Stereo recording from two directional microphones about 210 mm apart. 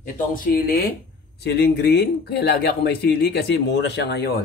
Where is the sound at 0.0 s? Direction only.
40° left (ahead or behind).